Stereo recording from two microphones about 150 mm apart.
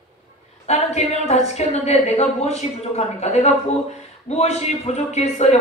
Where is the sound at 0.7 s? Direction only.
45° left (ahead or behind).